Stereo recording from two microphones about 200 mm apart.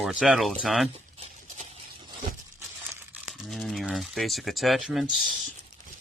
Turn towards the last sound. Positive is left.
turn(degrees=0)  # may be behind; listen again after turning